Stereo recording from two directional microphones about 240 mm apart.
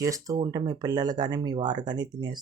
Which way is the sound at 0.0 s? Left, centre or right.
Centre.